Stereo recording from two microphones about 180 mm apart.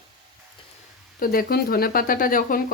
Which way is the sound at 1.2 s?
55° left (ahead or behind).